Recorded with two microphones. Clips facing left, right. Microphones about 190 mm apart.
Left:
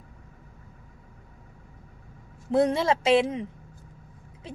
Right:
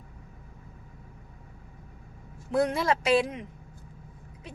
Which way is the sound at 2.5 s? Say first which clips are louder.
Left 3 dB; 25° left (ahead or behind).